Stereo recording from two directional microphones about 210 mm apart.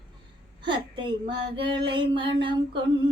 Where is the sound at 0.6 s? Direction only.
20° right (ahead or behind).